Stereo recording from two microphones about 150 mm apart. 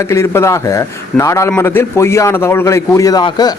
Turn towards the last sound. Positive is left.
turn(degrees=30)  # may be behind; listen again after turning